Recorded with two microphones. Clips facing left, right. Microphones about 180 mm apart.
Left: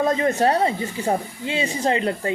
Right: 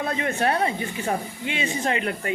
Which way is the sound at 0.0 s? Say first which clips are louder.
Left 5 dB; 35° left (ahead or behind).